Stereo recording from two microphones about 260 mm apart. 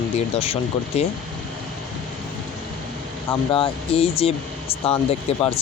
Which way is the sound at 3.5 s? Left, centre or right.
Left.